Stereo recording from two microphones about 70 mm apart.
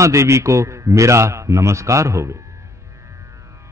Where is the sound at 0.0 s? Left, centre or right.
Right.